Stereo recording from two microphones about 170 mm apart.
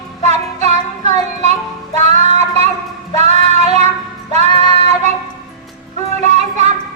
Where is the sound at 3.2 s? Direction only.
40° right (ahead or behind).